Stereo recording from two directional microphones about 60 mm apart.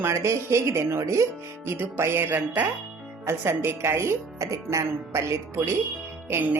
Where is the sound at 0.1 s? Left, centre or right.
Right.